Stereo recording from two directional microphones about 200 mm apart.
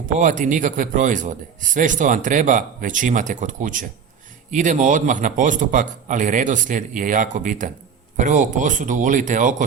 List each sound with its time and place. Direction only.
0.0 s a man's voice: 40° right (ahead or behind)